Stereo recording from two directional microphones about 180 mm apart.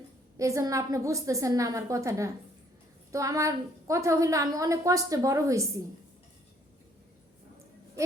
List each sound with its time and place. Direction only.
0.3 s a woman's voice: 15° right (ahead or behind)